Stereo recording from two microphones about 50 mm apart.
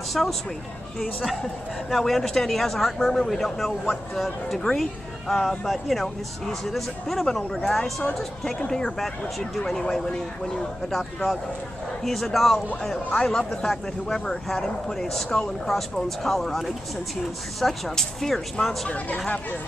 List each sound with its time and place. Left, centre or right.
0.1 s speech: centre
1.9 s speech: centre
13.2 s speech: centre
18.9 s speech: left